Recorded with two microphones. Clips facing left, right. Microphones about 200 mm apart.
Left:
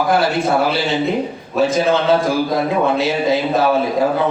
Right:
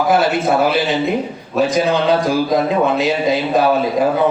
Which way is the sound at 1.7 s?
15° right (ahead or behind).